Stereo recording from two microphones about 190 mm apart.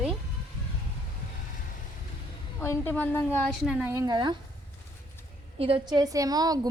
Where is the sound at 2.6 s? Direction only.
10° left (ahead or behind).